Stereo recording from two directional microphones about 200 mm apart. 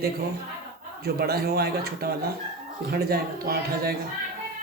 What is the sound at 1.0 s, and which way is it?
A man's voice, 50° right (ahead or behind).